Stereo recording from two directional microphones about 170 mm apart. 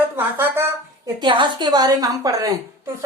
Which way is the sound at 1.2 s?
25° right (ahead or behind).